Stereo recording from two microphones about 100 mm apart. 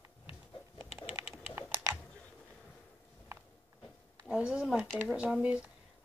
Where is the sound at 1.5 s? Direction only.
25° right (ahead or behind).